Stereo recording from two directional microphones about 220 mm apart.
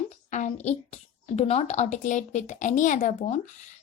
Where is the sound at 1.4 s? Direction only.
30° left (ahead or behind).